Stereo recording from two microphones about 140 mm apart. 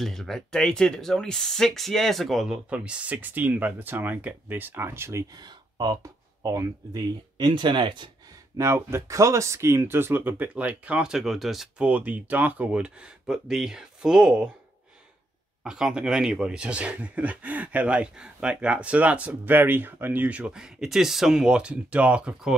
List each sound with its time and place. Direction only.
0.0 s speech: centre (ahead or behind); by 5.2 s 15° right (ahead or behind)
5.3 s speech: 30° right (ahead or behind)
8.5 s speech: 20° right (ahead or behind)
15.6 s speech: 5° right (ahead or behind)